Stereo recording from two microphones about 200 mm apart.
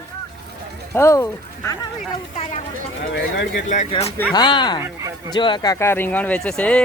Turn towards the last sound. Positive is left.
turn(degrees=5)  # may be behind; listen again after turning